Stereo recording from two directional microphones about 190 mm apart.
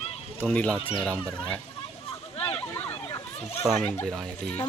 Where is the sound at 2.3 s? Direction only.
35° left (ahead or behind).